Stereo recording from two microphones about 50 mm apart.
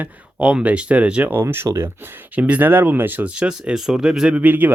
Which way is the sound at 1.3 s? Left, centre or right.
Right.